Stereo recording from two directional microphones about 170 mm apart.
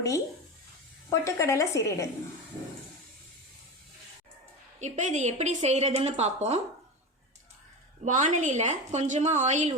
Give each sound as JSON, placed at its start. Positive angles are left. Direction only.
{"t": 1.1, "sound": "a woman's voice", "side_deg": 20}
{"t": 4.8, "sound": "a woman's voice", "side_deg": -45}
{"t": 8.0, "sound": "a woman's voice", "side_deg": -45}